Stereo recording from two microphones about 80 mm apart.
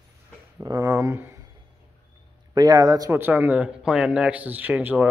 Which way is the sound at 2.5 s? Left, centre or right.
Right.